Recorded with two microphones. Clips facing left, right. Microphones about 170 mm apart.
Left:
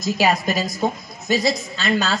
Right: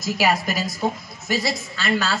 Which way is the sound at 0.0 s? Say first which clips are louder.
Left 2 dB; 20° left (ahead or behind).